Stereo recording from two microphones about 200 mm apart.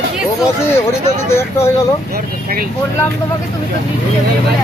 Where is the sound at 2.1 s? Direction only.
45° right (ahead or behind).